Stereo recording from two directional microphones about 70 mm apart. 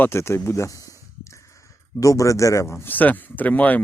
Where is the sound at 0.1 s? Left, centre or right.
Left.